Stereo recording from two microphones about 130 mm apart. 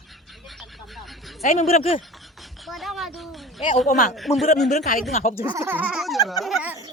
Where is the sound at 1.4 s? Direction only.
90° left.